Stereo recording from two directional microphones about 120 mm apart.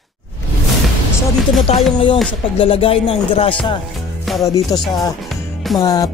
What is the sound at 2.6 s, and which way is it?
Music, 50° left (ahead or behind).